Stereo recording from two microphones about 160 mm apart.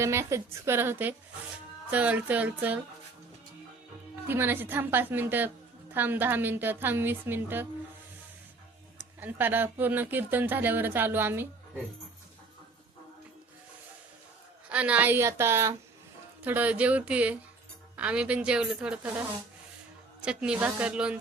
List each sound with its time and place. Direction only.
0.0 s speech: 15° right (ahead or behind)
4.3 s speech: 15° right (ahead or behind)
9.2 s speech: 10° right (ahead or behind)
14.7 s speech: 10° right (ahead or behind)
20.2 s speech: 5° right (ahead or behind)